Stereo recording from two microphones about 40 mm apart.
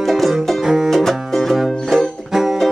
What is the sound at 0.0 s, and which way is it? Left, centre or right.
Music, centre.